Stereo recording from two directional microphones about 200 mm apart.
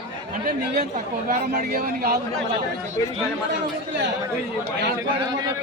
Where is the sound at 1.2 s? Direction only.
45° right (ahead or behind).